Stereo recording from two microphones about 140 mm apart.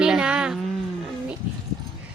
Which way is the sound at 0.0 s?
5° right (ahead or behind).